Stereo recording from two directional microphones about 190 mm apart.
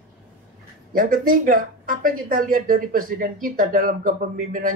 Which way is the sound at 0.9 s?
50° right (ahead or behind).